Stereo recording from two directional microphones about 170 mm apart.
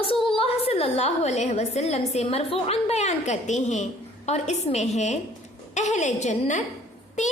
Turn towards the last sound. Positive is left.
turn(degrees=45)  # may be behind; listen again after turning